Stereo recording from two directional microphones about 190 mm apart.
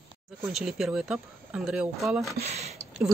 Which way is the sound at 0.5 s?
Centre (ahead or behind).